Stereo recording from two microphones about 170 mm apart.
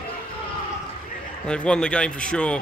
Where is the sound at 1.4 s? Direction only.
5° left (ahead or behind).